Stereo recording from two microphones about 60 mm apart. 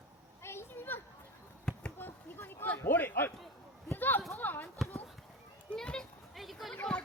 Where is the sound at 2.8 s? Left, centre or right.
Left.